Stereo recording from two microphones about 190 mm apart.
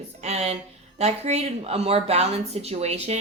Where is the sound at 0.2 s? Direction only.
35° right (ahead or behind).